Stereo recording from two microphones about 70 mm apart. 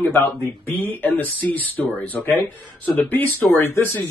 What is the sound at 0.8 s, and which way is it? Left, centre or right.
Speech, left.